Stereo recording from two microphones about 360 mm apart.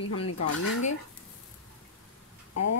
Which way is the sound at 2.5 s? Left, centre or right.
Left.